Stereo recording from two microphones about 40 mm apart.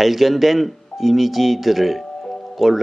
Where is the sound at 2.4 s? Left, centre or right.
Centre.